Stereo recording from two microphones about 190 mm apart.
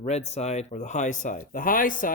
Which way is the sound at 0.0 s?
35° left (ahead or behind).